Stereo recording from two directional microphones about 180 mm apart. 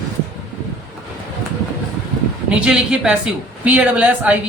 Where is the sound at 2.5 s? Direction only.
5° right (ahead or behind).